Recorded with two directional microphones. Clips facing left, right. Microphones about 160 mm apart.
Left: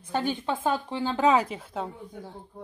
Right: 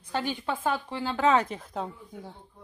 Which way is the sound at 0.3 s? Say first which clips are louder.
Left 2 dB; 20° left (ahead or behind).